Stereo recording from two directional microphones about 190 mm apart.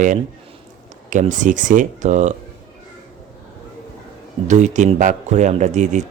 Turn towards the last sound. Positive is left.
turn(degrees=-40)  # may be behind; listen again after turning